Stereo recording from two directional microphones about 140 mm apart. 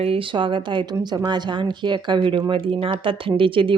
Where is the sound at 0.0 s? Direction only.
40° right (ahead or behind).